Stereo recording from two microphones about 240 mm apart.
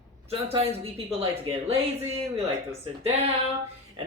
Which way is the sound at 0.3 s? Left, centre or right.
Right.